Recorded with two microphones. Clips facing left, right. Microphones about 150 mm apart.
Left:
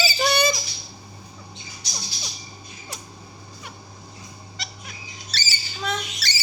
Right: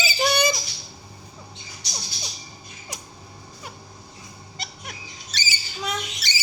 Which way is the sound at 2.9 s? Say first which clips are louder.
Even; 15° right (ahead or behind).